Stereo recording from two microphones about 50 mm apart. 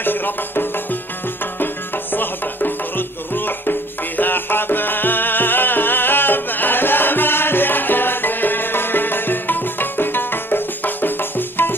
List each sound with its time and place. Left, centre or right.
0.0 s music: left
2.1 s music: left